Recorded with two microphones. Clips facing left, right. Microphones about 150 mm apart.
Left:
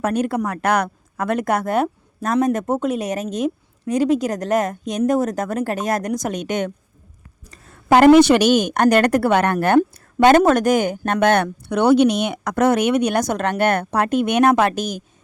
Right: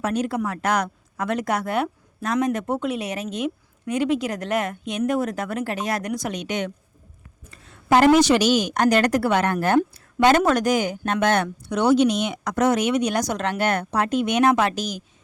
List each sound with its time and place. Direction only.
0.0 s speech: 55° left (ahead or behind)
7.4 s a sound: 40° left (ahead or behind)
7.9 s a woman's voice: 60° left (ahead or behind)